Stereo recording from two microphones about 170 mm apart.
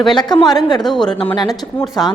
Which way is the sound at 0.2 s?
25° left (ahead or behind).